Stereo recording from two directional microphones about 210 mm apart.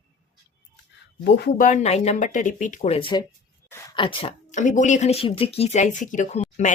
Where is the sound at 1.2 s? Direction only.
50° left (ahead or behind).